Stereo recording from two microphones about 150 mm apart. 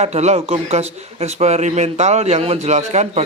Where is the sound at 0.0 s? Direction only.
50° right (ahead or behind).